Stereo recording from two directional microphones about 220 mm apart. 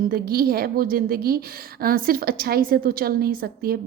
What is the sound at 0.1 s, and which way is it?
A woman's voice, 40° right (ahead or behind).